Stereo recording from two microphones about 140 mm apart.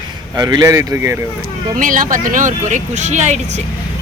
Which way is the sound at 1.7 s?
75° right (ahead or behind).